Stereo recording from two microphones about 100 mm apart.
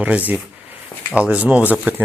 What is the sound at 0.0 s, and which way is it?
Speech, 15° right (ahead or behind).